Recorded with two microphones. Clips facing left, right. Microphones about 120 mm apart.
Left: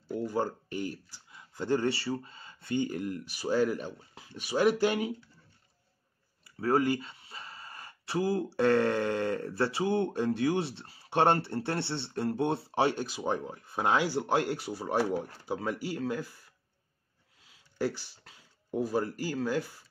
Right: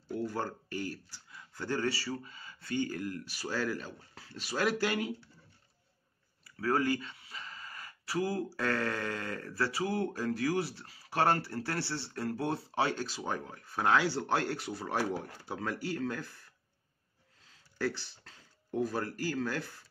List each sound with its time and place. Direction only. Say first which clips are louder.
0.2 s speech: left 5 dB; 15° left (ahead or behind)
6.4 s speech: left 3 dB; 20° left (ahead or behind)
17.5 s speech: left 2 dB; 15° left (ahead or behind)